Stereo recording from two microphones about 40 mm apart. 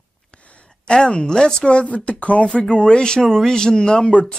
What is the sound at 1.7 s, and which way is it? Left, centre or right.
Speech, left.